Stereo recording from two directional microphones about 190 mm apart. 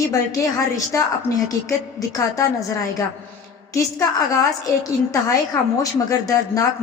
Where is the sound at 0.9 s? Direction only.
15° left (ahead or behind).